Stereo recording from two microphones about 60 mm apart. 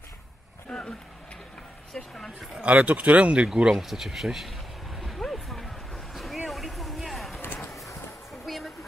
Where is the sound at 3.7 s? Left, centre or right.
Centre.